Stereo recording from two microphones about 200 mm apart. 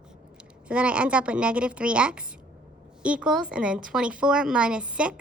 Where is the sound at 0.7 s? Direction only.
5° right (ahead or behind).